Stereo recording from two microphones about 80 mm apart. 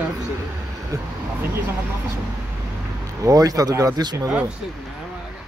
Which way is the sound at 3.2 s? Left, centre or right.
Right.